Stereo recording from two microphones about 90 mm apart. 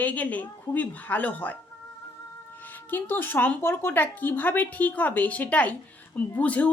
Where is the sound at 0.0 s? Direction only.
15° left (ahead or behind).